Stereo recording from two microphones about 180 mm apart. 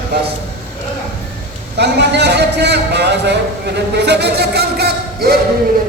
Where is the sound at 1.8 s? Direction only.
70° right (ahead or behind).